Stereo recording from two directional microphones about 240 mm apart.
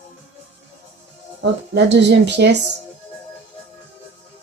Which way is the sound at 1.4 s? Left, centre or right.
Right.